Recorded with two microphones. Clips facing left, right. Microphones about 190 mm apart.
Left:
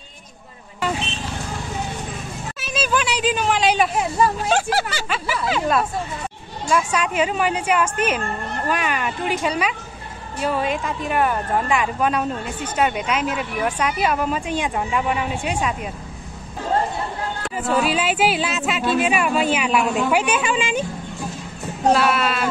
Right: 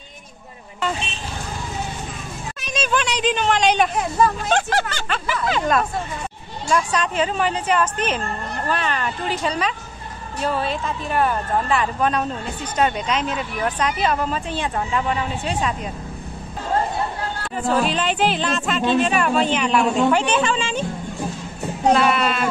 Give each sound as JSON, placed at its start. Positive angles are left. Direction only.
{"t": 2.6, "sound": "speech", "side_deg": 5}
{"t": 17.6, "sound": "speech", "side_deg": 5}
{"t": 21.9, "sound": "speech", "side_deg": 0}